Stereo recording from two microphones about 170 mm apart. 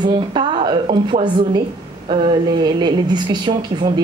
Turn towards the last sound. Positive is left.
turn(degrees=-30)  # may be behind; listen again after turning